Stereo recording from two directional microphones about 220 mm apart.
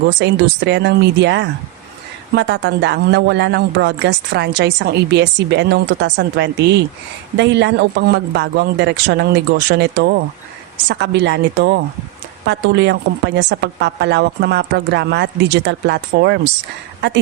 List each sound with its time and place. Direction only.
0.2 s speech: 50° right (ahead or behind)